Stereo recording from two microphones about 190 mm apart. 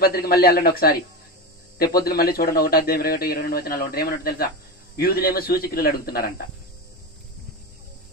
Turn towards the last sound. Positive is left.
turn(degrees=50)  # may be behind; listen again after turning